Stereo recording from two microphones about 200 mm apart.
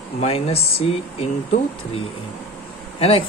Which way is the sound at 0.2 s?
30° left (ahead or behind).